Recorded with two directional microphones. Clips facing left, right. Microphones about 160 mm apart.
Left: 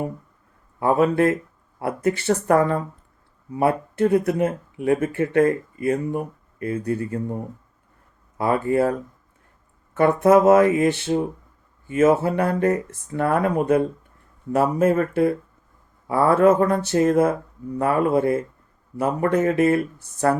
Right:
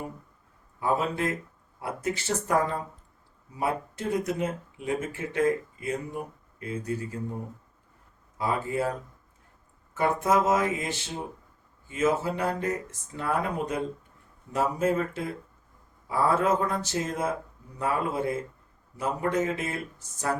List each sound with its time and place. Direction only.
0.8 s speech: 60° left (ahead or behind)
8.4 s speech: 60° left (ahead or behind)